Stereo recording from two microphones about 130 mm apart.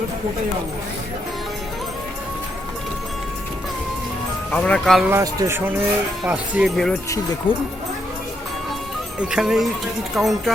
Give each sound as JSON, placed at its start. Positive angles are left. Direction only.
{"t": 4.5, "sound": "speech", "side_deg": 10}
{"t": 5.1, "sound": "speech", "side_deg": -25}
{"t": 7.5, "sound": "speech", "side_deg": -10}
{"t": 9.1, "sound": "speech", "side_deg": -5}